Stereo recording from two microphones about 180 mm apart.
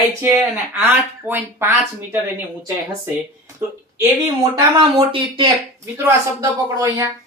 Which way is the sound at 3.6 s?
10° right (ahead or behind).